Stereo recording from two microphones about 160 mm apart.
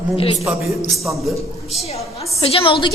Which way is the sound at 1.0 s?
Centre (ahead or behind).